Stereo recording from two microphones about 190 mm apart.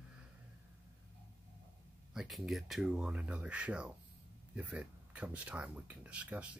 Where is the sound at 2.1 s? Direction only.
Centre (ahead or behind).